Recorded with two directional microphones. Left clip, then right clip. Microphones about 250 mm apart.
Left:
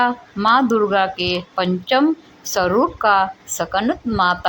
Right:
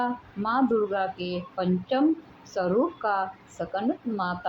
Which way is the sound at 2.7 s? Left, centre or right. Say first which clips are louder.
Left 5 dB; left.